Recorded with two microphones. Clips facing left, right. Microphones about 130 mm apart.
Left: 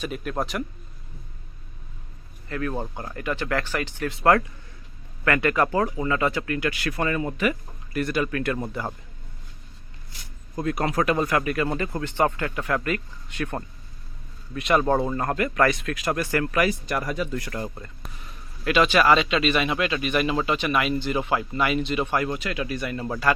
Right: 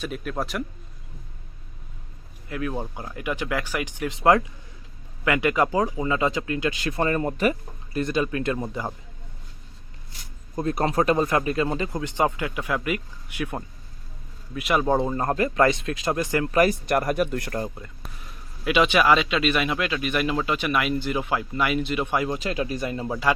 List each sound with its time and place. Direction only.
0.0 s speech: centre (ahead or behind)
2.5 s speech: 10° right (ahead or behind)
7.0 s speech: 40° right (ahead or behind)
7.9 s speech: 20° right (ahead or behind)
10.5 s speech: 25° right (ahead or behind); by 14.9 s 5° right (ahead or behind)
14.9 s speech: 25° right (ahead or behind)
16.5 s speech: 35° right (ahead or behind)
16.8 s speech: 55° right (ahead or behind)
17.7 s speech: 5° right (ahead or behind)
18.6 s speech: 15° right (ahead or behind)
22.4 s speech: 30° right (ahead or behind)
23.0 s speech: 15° right (ahead or behind)